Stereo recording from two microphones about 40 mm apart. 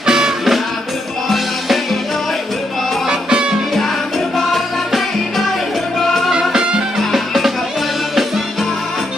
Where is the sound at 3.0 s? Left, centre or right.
Right.